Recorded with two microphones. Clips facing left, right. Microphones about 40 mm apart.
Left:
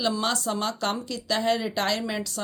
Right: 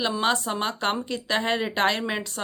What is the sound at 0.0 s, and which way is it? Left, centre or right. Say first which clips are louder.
Speech: right 2 dB; right.